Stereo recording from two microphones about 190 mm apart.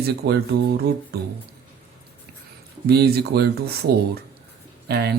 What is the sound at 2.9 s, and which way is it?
Speech, 55° right (ahead or behind).